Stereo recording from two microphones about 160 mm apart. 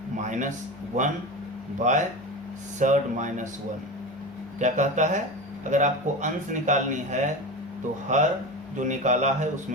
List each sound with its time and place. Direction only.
0.2 s a sound: 50° right (ahead or behind)
1.8 s speech: 50° right (ahead or behind)
4.6 s speech: 50° right (ahead or behind)